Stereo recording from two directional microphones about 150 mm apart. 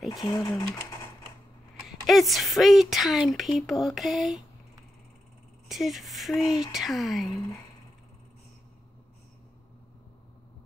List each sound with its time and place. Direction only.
0.1 s speech: 25° left (ahead or behind)
1.9 s a woman's voice: centre (ahead or behind)
5.7 s a woman's voice: centre (ahead or behind)